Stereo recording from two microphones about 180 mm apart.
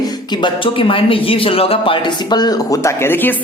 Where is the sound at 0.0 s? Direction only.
25° left (ahead or behind).